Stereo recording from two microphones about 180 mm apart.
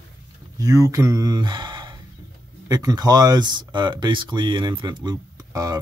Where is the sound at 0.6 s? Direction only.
20° right (ahead or behind).